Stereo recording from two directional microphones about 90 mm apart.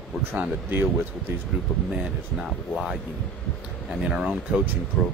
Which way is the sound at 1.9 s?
10° right (ahead or behind).